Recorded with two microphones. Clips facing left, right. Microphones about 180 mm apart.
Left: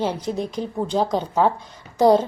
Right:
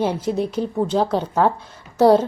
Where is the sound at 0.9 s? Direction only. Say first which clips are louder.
Right 2 dB; 10° left (ahead or behind).